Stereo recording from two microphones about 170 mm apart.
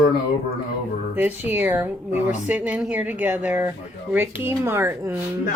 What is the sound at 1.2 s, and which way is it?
A woman's voice, 10° right (ahead or behind).